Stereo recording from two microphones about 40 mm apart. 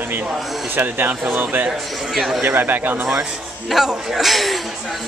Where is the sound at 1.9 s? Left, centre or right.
Centre.